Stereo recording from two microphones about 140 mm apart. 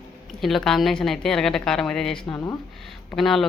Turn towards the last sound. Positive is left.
turn(degrees=0)  # may be behind; listen again after turning